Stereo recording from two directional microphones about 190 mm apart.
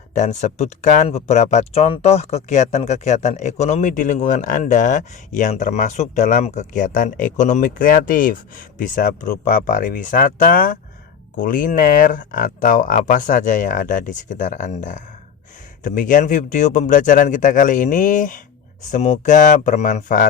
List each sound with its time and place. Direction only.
0.1 s speech: 40° left (ahead or behind)